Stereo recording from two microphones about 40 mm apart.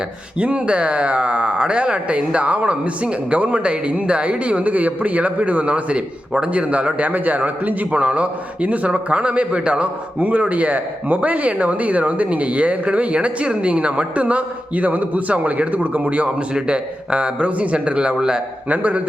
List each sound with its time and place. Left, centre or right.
0.3 s speech: right
16.6 s speech: right
18.7 s speech: right